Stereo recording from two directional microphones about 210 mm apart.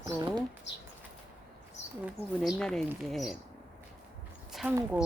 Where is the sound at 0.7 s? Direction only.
60° left (ahead or behind).